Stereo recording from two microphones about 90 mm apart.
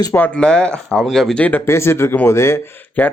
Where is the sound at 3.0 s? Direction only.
20° left (ahead or behind).